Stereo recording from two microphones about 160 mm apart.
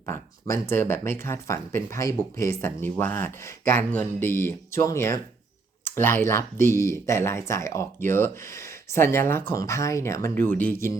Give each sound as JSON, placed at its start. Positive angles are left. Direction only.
{"t": 0.0, "sound": "speech", "side_deg": 20}